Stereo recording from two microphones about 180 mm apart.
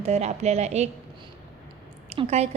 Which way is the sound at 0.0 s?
35° right (ahead or behind).